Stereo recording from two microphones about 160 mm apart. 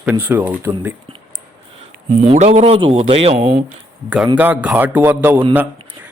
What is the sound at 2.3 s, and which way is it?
Speech, 45° right (ahead or behind).